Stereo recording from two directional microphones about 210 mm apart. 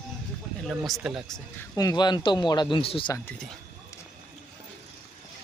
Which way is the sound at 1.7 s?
20° left (ahead or behind).